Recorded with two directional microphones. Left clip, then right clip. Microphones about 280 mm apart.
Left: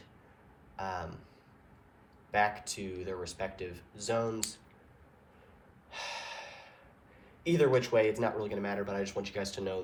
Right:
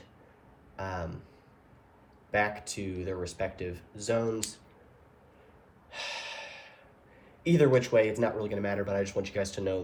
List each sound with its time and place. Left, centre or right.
0.8 s speech: centre
2.3 s speech: centre
5.9 s snort: left
7.4 s speech: centre